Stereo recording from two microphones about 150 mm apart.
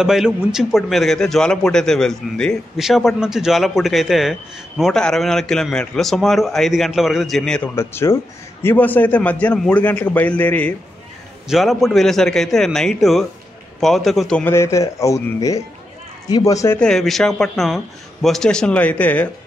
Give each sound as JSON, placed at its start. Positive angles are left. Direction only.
{"t": 0.0, "sound": "a man's voice", "side_deg": -5}
{"t": 7.7, "sound": "a man's voice", "side_deg": 15}
{"t": 14.5, "sound": "speech", "side_deg": 20}
{"t": 16.8, "sound": "a man's voice", "side_deg": 0}